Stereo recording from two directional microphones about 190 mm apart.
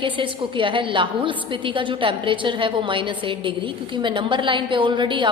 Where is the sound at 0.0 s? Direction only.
25° right (ahead or behind).